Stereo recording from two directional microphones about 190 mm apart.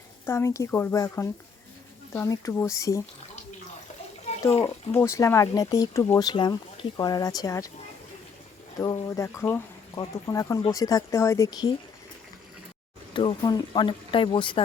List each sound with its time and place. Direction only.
0.3 s speech: 15° left (ahead or behind)
4.9 s speech: 15° left (ahead or behind)
8.8 s speech: 15° left (ahead or behind)
13.1 s speech: 25° left (ahead or behind)